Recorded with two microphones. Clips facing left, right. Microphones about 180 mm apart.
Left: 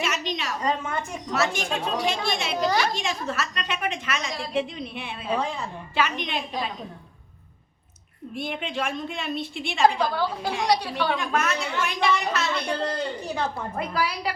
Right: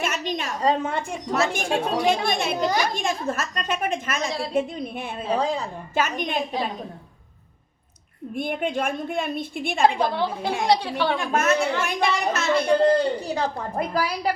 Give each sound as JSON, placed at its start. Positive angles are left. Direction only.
{"t": 0.0, "sound": "a sound", "side_deg": -50}
{"t": 0.6, "sound": "a woman's voice", "side_deg": -35}
{"t": 1.3, "sound": "a woman's voice", "side_deg": -50}
{"t": 2.6, "sound": "a woman's voice", "side_deg": -15}
{"t": 2.9, "sound": "a woman's voice", "side_deg": -50}
{"t": 8.4, "sound": "a woman's voice", "side_deg": -50}
{"t": 10.1, "sound": "a woman's voice", "side_deg": -25}
{"t": 11.3, "sound": "a woman's voice", "side_deg": -45}